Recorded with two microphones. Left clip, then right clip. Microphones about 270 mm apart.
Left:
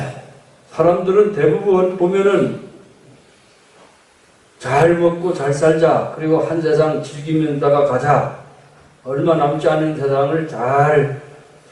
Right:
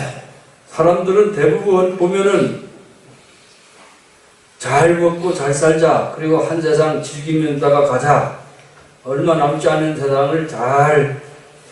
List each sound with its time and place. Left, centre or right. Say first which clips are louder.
0.7 s a man's voice: right 1 dB; centre
4.6 s a man's voice: right 1 dB; centre